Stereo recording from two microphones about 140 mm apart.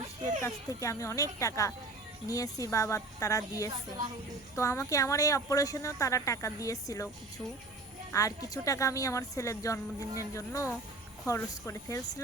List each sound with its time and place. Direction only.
0.8 s speech: 20° left (ahead or behind)
8.1 s speech: 25° left (ahead or behind)